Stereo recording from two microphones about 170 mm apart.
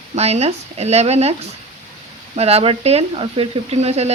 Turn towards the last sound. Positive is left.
turn(degrees=-40)  # may be behind; listen again after turning